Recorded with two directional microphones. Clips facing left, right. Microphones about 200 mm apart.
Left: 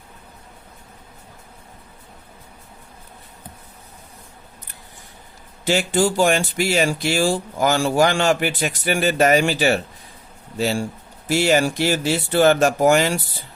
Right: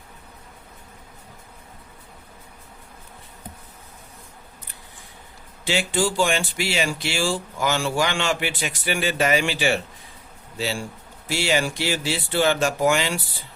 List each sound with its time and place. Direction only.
5.6 s speech: 40° left (ahead or behind)